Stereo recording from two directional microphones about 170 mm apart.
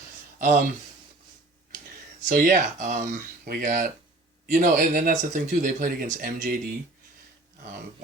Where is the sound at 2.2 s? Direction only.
55° right (ahead or behind).